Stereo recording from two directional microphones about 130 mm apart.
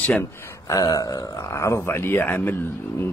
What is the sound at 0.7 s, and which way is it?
Speech, 30° left (ahead or behind).